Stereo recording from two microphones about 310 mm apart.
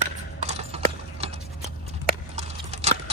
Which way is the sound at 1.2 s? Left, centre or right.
Centre.